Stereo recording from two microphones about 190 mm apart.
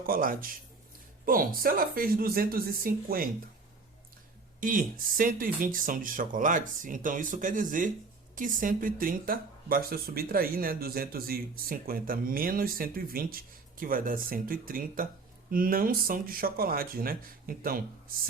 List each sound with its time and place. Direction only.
0.0 s speech: 50° right (ahead or behind)
4.6 s speech: 45° right (ahead or behind)